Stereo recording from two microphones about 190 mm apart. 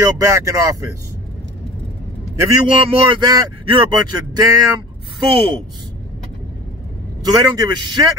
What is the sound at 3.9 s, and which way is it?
A man's voice, 20° right (ahead or behind).